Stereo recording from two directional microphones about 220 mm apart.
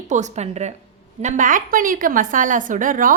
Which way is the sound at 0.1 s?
30° right (ahead or behind).